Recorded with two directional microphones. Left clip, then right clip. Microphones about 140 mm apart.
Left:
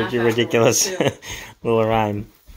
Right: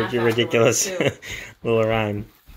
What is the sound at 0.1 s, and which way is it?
Speech, 5° left (ahead or behind).